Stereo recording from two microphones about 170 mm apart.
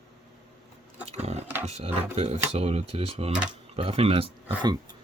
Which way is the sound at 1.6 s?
35° right (ahead or behind).